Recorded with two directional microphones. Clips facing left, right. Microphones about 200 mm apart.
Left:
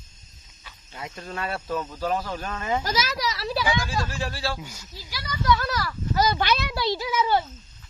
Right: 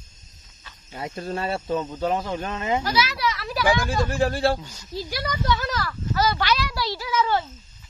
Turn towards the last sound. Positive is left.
turn(degrees=15)  # may be behind; listen again after turning